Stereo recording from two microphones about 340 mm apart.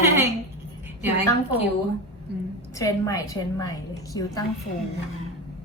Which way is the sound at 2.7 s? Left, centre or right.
Centre.